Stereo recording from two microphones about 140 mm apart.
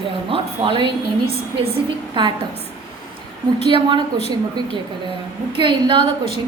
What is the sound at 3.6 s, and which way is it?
Speech, 40° right (ahead or behind).